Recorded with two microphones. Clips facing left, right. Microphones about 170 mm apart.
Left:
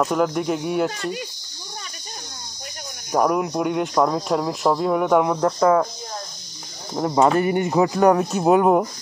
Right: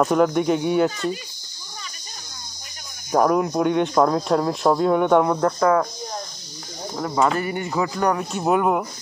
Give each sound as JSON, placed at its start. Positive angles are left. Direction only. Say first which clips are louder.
{"t": 0.0, "sound": "speech", "louder": "right 3 dB", "side_deg": 0}
{"t": 3.1, "sound": "speech", "louder": "right 1 dB", "side_deg": 5}
{"t": 5.6, "sound": "speech", "louder": "left 3 dB", "side_deg": 20}
{"t": 7.0, "sound": "speech", "louder": "left 4 dB", "side_deg": 25}